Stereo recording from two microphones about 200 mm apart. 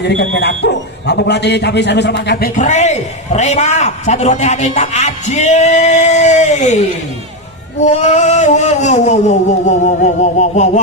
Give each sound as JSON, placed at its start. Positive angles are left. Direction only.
{"t": 0.0, "sound": "speech", "side_deg": 60}